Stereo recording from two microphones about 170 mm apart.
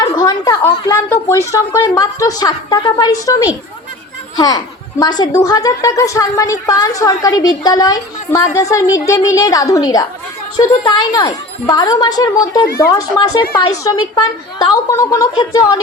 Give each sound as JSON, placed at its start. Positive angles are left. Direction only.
{"t": 0.0, "sound": "a sound", "side_deg": 20}
{"t": 0.9, "sound": "a woman's voice", "side_deg": 15}
{"t": 12.6, "sound": "speech", "side_deg": 65}
{"t": 12.9, "sound": "a woman's voice", "side_deg": 20}